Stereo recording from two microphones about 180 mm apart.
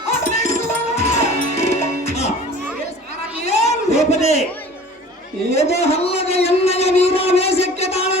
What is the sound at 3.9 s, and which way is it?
Speech, 35° left (ahead or behind).